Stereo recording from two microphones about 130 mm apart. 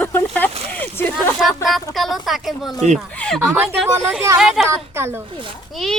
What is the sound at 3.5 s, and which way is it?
Speech, 15° right (ahead or behind).